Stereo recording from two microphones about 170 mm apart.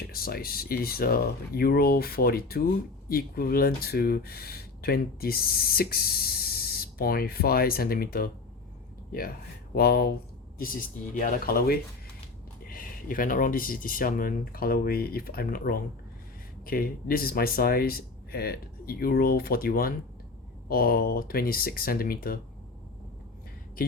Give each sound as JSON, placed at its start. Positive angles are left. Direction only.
{"t": 0.0, "sound": "speech", "side_deg": 60}
{"t": 9.7, "sound": "speech", "side_deg": 65}
{"t": 10.6, "sound": "speech", "side_deg": 55}